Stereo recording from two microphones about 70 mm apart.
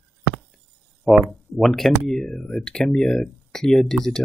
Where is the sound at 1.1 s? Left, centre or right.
Centre.